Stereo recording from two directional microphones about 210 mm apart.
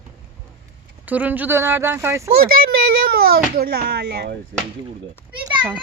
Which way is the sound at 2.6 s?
45° right (ahead or behind).